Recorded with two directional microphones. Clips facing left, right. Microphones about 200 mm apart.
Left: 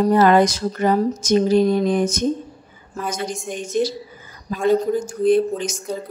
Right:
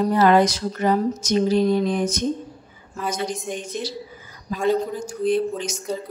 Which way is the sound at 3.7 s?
45° left (ahead or behind).